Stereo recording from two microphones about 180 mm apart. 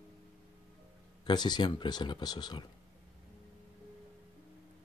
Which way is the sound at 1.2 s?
25° left (ahead or behind).